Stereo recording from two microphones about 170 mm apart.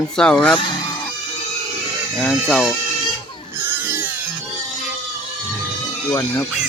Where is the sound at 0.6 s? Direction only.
25° left (ahead or behind).